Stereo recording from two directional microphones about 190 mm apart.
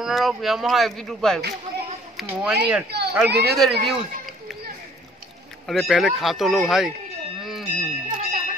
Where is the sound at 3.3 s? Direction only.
55° right (ahead or behind).